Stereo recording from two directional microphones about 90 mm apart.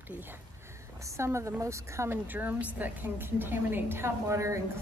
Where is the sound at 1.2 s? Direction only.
30° right (ahead or behind).